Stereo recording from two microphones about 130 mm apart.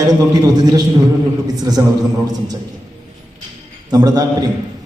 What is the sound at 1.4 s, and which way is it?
Speech, 30° right (ahead or behind).